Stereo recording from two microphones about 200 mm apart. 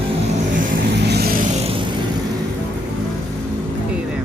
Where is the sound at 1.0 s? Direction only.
55° right (ahead or behind).